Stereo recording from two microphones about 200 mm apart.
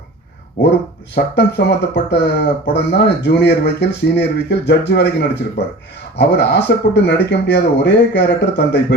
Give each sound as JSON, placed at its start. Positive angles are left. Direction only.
{"t": 1.1, "sound": "speech", "side_deg": 55}